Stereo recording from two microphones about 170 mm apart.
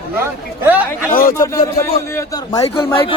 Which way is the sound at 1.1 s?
60° left (ahead or behind).